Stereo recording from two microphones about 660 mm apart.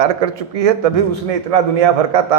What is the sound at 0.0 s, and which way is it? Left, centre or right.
A man's voice, right.